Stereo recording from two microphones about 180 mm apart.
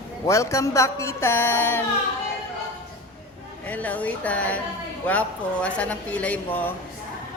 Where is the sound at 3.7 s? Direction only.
10° left (ahead or behind).